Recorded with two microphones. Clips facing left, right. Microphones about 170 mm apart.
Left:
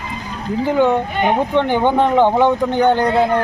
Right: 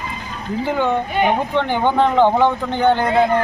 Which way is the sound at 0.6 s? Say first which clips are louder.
Left 4 dB; 15° left (ahead or behind).